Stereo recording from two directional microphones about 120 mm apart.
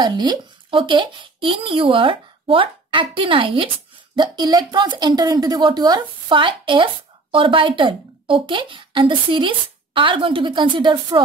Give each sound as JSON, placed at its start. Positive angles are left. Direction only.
{"t": 0.0, "sound": "speech", "side_deg": -40}